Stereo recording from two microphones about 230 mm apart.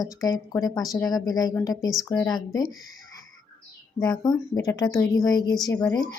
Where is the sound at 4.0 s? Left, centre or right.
Centre.